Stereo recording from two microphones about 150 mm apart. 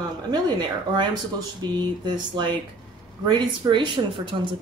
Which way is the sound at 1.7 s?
30° right (ahead or behind).